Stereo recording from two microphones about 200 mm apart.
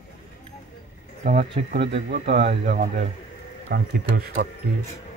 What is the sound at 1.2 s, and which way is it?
Speech, 35° right (ahead or behind).